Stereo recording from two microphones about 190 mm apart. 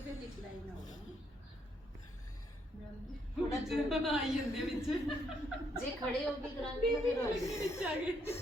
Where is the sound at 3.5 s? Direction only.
Centre (ahead or behind).